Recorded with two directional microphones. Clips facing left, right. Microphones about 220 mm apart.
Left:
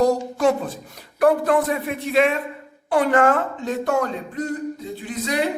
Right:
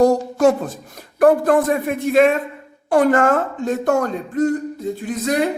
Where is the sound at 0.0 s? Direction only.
45° right (ahead or behind).